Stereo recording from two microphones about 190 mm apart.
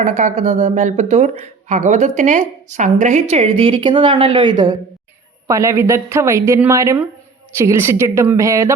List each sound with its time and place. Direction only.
0.0 s speech: 40° right (ahead or behind); by 8.7 s 15° right (ahead or behind)